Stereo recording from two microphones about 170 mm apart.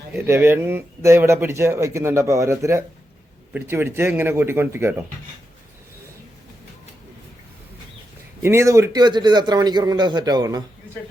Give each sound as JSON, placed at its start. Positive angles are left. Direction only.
{"t": 0.1, "sound": "speech", "side_deg": -15}
{"t": 8.4, "sound": "a man's voice", "side_deg": -15}